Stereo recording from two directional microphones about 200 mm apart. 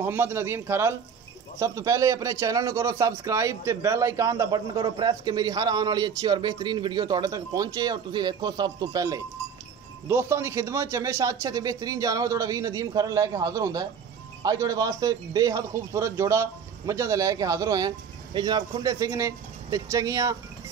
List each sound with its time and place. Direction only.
0.0 s a man's voice: 10° right (ahead or behind)